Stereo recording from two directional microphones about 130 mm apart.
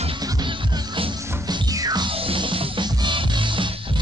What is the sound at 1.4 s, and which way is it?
Music, 30° right (ahead or behind).